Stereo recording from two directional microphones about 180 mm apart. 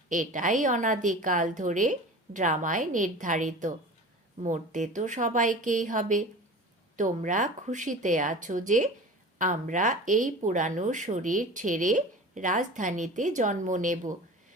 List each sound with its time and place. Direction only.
0.1 s speech: 45° right (ahead or behind)